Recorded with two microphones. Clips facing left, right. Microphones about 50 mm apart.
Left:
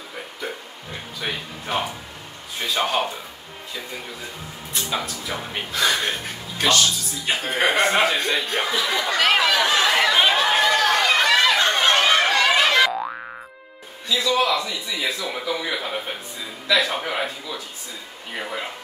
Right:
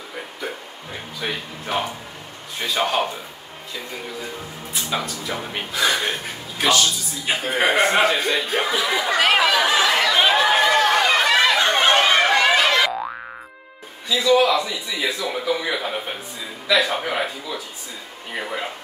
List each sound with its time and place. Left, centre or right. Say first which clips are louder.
1.2 s speech: right 1 dB; centre
4.7 s speech: right 1 dB; centre
10.1 s chatter: right 2 dB; centre
10.7 s chatter: right 2 dB; right
12.6 s boing: even; centre
14.0 s speech: right 4 dB; centre